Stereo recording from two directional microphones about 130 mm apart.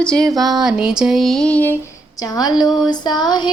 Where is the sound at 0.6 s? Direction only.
5° right (ahead or behind); by 1.8 s 10° left (ahead or behind).